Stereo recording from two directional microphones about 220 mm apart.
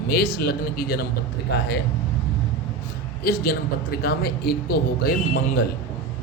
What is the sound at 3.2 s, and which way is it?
A man's voice, 45° left (ahead or behind).